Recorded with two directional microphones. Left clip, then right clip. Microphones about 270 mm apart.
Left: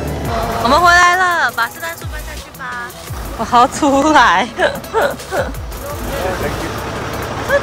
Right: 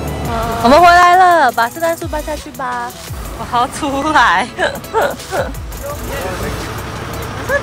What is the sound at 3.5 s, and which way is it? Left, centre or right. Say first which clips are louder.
Speech: left 5 dB; centre.